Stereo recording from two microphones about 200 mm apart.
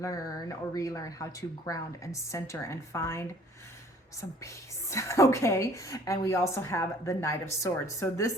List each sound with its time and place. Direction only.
0.0 s a woman's voice: 15° left (ahead or behind)